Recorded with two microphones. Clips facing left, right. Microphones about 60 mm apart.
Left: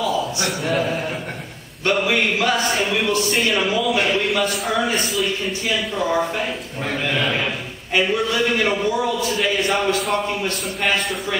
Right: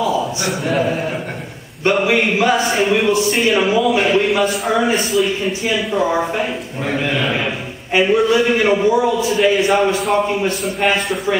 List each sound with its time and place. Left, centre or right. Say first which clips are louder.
0.0 s a sound: right 4 dB; centre
0.5 s a man's voice: right 5 dB; centre
1.9 s a man's voice: right 4 dB; centre
5.4 s a man's voice: right 4 dB; centre